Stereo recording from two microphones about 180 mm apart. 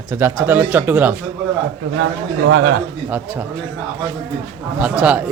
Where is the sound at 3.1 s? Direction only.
10° right (ahead or behind).